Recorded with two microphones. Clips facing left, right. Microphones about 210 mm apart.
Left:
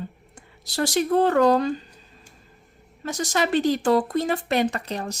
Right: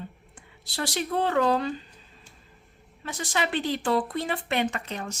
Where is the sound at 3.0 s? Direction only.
40° left (ahead or behind).